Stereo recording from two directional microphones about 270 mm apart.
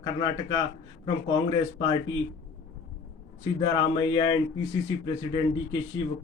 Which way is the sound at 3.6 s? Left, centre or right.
Centre.